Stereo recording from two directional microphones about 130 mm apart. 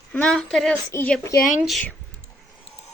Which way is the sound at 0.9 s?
20° left (ahead or behind).